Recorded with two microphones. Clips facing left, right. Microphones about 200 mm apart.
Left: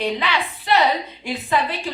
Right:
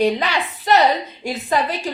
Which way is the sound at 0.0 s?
45° right (ahead or behind).